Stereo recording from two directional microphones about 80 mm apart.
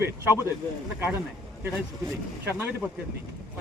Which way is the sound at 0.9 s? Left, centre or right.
Right.